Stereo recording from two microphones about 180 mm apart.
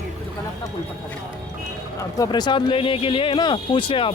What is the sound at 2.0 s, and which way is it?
A man's voice, 20° left (ahead or behind).